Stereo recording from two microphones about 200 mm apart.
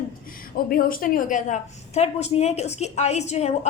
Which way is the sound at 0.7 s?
45° left (ahead or behind).